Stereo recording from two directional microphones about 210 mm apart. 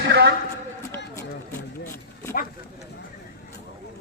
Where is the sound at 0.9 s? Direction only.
10° left (ahead or behind).